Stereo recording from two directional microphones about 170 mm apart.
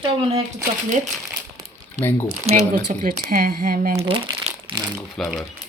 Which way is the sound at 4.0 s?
35° right (ahead or behind).